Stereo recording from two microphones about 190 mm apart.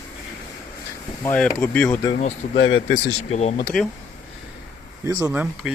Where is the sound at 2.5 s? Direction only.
75° left (ahead or behind).